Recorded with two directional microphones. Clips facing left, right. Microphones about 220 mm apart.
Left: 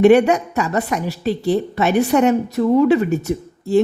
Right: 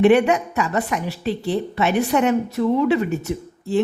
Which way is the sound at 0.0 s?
40° left (ahead or behind).